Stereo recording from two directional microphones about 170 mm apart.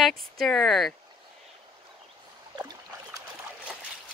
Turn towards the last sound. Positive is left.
turn(degrees=-20)  # may be behind; listen again after turning